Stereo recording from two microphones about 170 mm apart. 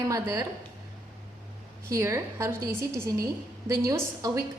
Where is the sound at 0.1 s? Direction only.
20° right (ahead or behind).